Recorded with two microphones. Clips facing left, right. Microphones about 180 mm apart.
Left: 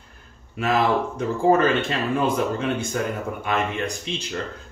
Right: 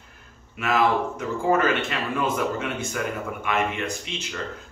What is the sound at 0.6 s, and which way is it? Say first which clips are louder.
Speech: left 1 dB; 35° left (ahead or behind).